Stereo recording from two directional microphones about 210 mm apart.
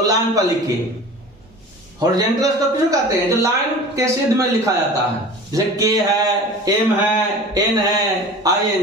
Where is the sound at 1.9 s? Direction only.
15° right (ahead or behind).